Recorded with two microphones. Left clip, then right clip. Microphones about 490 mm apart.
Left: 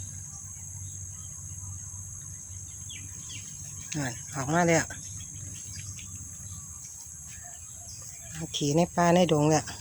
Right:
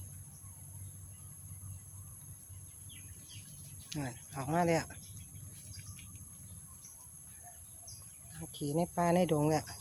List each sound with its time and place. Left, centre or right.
3.8 s speech: right
8.7 s speech: right